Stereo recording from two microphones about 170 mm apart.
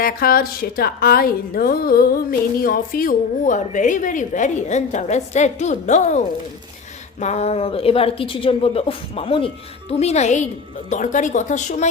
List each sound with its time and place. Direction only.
0.0 s a woman's voice: 60° left (ahead or behind)